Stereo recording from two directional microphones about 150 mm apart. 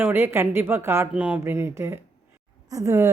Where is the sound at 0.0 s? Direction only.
15° right (ahead or behind).